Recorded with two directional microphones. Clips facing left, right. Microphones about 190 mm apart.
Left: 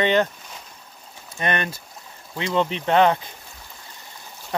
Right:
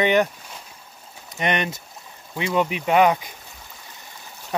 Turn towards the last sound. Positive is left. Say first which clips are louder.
# even
turn(degrees=-10)  # may be behind; listen again after turning